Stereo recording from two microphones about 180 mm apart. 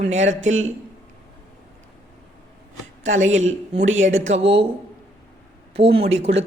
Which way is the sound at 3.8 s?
90° right.